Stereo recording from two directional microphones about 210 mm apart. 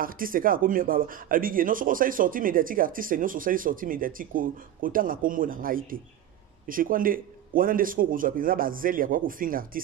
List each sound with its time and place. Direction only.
0.0 s speech: 40° right (ahead or behind)